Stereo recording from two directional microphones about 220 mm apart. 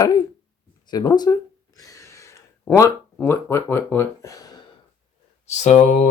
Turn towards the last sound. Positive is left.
turn(degrees=35)  # may be behind; listen again after turning